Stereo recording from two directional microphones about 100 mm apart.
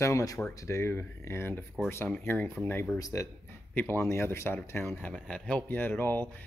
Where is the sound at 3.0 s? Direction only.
35° left (ahead or behind).